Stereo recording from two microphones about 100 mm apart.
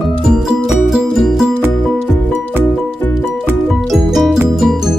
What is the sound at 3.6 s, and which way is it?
Music, centre (ahead or behind).